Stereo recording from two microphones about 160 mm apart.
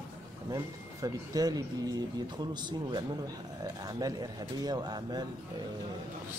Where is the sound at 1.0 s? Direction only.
25° right (ahead or behind).